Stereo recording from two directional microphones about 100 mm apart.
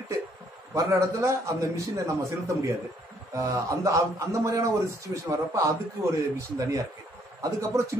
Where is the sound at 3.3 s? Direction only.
30° right (ahead or behind).